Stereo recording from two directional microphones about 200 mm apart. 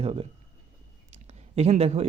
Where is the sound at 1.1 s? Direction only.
30° right (ahead or behind).